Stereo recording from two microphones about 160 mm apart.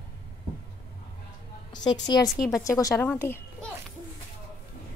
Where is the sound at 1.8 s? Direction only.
25° left (ahead or behind).